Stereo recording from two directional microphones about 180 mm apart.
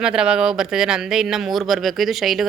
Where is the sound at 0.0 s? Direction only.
5° right (ahead or behind).